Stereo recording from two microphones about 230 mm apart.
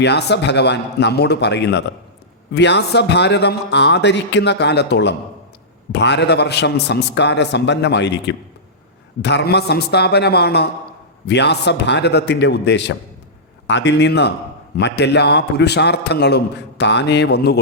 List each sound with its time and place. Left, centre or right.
0.0 s a man's voice: left